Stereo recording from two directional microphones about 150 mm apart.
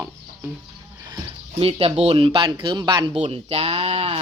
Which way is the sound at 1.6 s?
40° right (ahead or behind).